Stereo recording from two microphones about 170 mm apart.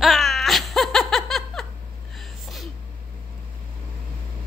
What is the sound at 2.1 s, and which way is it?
Sneeze, centre (ahead or behind).